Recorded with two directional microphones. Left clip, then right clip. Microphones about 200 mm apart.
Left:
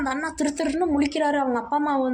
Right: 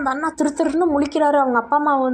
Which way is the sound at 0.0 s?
20° right (ahead or behind).